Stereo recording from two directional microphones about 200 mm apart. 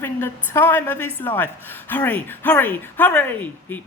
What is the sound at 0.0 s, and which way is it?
A woman's voice, 10° left (ahead or behind).